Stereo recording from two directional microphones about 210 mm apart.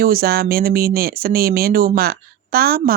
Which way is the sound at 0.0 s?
45° right (ahead or behind).